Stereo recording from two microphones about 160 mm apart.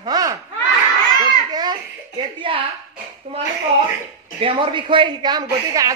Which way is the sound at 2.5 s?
30° right (ahead or behind).